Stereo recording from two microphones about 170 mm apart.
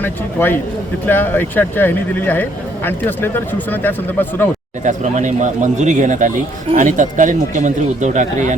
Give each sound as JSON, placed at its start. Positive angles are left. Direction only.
{"t": 0.0, "sound": "speech", "side_deg": 10}
{"t": 4.8, "sound": "speech", "side_deg": -45}